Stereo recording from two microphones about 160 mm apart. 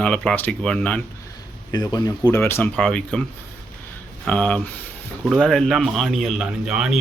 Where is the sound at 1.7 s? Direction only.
25° left (ahead or behind); by 3.2 s 5° left (ahead or behind).